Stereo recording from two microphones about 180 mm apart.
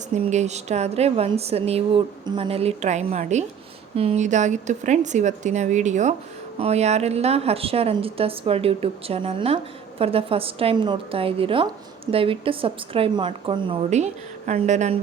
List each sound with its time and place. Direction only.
0.1 s a woman's voice: 40° right (ahead or behind)
13.9 s speech: 40° right (ahead or behind)